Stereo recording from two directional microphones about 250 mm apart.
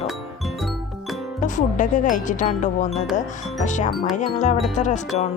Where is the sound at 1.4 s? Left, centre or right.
Left.